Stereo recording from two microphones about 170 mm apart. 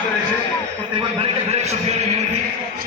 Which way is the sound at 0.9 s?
35° right (ahead or behind).